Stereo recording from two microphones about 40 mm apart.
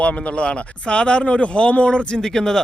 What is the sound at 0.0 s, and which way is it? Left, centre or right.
Speech, left.